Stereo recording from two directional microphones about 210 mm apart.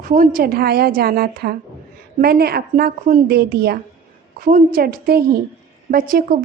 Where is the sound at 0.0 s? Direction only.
40° right (ahead or behind).